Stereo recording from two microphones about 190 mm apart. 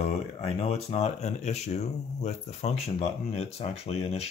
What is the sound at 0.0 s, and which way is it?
Speech, 35° left (ahead or behind).